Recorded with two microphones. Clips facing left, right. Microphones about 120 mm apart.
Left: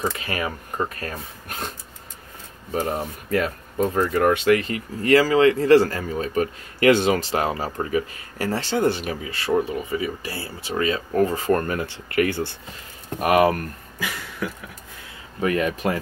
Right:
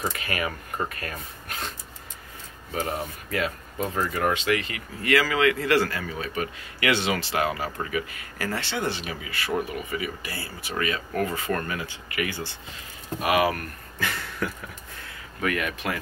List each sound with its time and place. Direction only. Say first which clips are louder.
0.1 s speech: left 2 dB; 30° left (ahead or behind)
2.7 s speech: left 4 dB; 40° left (ahead or behind)
8.8 s speech: left 8 dB; 50° left (ahead or behind)
9.2 s speech: left 6 dB; 35° left (ahead or behind)
11.8 s speech: left 8 dB; 55° left (ahead or behind)
13.2 s speech: left 5 dB; 45° left (ahead or behind)
13.9 s a sound: right 1 dB; 5° left (ahead or behind)
15.4 s speech: left 6 dB; 30° left (ahead or behind)